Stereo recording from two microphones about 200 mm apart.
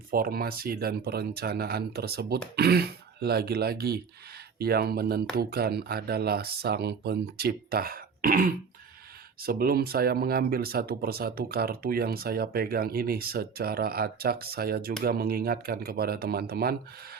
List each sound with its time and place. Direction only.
0.1 s speech: 50° right (ahead or behind)